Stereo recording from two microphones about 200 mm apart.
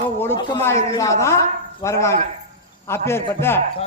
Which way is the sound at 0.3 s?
15° left (ahead or behind).